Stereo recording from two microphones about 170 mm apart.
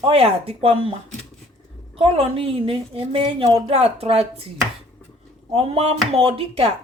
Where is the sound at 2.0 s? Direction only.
35° right (ahead or behind).